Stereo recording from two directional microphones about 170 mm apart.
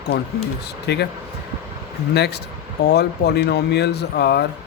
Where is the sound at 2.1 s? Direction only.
75° left (ahead or behind).